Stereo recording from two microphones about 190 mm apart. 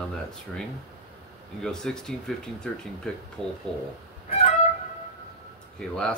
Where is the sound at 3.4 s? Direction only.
5° left (ahead or behind).